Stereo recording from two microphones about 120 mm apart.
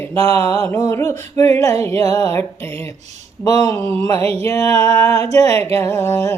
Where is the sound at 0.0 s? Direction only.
20° left (ahead or behind).